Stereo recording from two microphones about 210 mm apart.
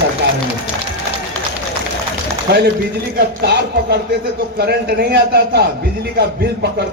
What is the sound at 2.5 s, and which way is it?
A man's voice, 50° right (ahead or behind).